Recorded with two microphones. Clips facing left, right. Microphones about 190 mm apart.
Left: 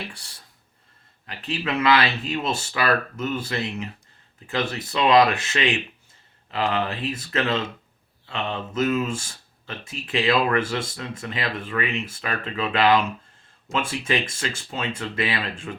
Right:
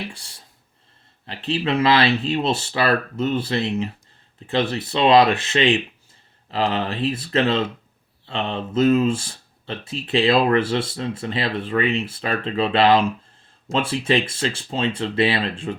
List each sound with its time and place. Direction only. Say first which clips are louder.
1.3 s speech: right 5 dB; 30° right (ahead or behind)